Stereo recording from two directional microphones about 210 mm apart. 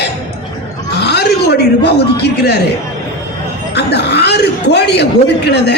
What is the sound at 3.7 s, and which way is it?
A man's voice, 50° left (ahead or behind).